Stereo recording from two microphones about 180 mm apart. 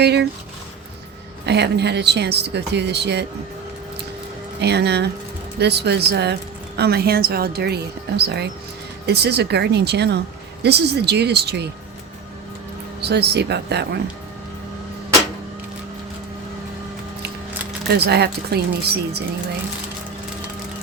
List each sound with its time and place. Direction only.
0.0 s speech: 65° right (ahead or behind)
1.5 s speech: 70° right (ahead or behind)
4.6 s speech: 70° right (ahead or behind)
13.0 s speech: 65° right (ahead or behind)
17.8 s speech: 65° right (ahead or behind)